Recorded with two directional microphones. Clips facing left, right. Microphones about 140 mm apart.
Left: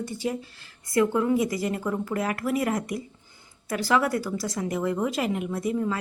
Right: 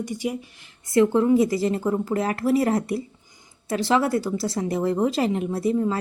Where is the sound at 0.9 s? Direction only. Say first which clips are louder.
Right 5 dB; 30° right (ahead or behind).